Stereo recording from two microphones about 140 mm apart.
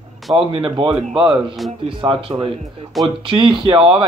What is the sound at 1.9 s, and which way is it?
Speech, 35° right (ahead or behind).